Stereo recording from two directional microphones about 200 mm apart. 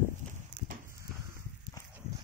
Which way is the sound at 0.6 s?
40° right (ahead or behind).